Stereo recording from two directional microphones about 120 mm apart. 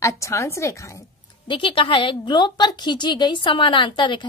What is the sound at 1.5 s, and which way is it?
A woman's voice, 45° left (ahead or behind).